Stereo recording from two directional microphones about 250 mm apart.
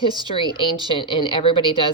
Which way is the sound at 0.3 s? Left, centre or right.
Centre.